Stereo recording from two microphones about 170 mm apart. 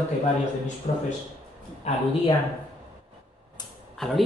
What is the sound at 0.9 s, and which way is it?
Speech, 45° left (ahead or behind).